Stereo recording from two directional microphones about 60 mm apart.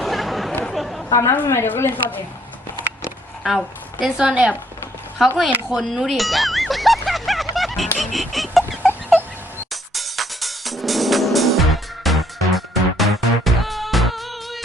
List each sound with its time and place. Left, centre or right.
0.0 s a sound: centre
1.1 s a woman's voice: left
1.5 s speech: left
4.0 s a woman's voice: centre
5.2 s speech: centre
5.7 s music: centre
7.9 s a sound: centre
9.9 s music: centre